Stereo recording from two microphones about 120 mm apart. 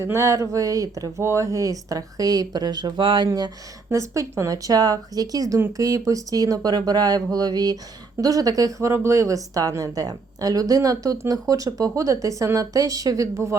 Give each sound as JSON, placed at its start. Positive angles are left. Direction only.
{"t": 0.0, "sound": "a woman's voice", "side_deg": -25}
{"t": 3.2, "sound": "a woman's voice", "side_deg": -30}